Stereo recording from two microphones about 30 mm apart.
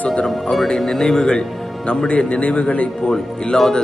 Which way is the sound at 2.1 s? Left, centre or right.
Left.